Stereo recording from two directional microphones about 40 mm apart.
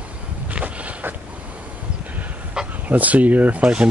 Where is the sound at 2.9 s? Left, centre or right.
Right.